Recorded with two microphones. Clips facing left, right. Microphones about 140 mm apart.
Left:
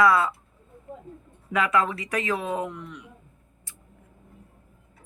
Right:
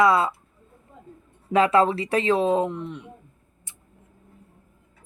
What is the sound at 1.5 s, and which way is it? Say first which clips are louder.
Speech: right 6 dB; 30° right (ahead or behind).